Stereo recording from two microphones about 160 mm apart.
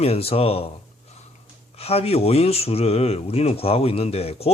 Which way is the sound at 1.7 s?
40° left (ahead or behind).